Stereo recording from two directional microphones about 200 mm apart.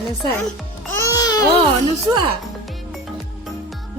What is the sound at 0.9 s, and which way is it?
Babbling, 15° left (ahead or behind).